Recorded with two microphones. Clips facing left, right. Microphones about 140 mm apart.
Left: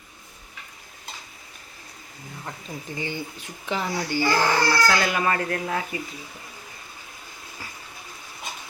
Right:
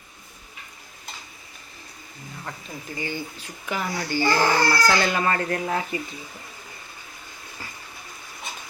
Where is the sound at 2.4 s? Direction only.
15° left (ahead or behind).